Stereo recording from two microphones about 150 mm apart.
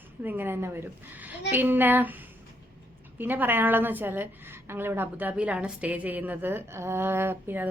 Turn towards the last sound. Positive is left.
turn(degrees=-15)  # may be behind; listen again after turning